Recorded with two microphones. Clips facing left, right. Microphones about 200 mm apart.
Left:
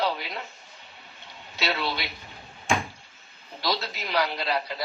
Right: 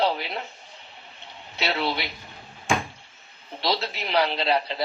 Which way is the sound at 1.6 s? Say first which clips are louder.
Right 3 dB; 25° right (ahead or behind).